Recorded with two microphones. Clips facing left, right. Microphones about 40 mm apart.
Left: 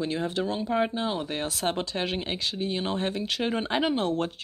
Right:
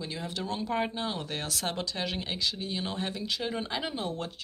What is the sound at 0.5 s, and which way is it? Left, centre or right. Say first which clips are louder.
Speech: left 1 dB; centre.